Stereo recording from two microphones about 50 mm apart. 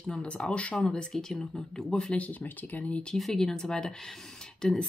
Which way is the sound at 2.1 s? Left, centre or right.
Left.